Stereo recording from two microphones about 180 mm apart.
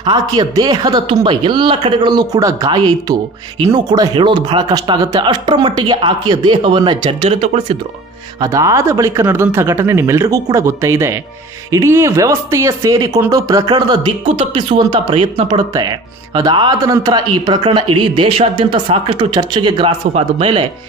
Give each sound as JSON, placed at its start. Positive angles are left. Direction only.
{"t": 0.0, "sound": "speech", "side_deg": -25}
{"t": 8.4, "sound": "speech", "side_deg": -20}